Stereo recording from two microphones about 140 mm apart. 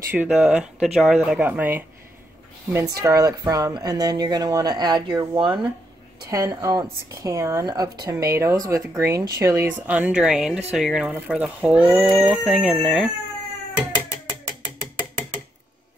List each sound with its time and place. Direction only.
0.1 s speech: 10° right (ahead or behind)
3.0 s speech: 25° right (ahead or behind)
6.2 s speech: 25° right (ahead or behind)
9.8 s speech: 10° right (ahead or behind)